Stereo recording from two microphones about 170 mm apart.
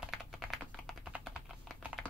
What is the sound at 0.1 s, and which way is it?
Typing, centre (ahead or behind).